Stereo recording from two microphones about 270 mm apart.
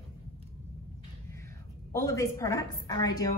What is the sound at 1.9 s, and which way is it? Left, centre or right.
Speech, centre.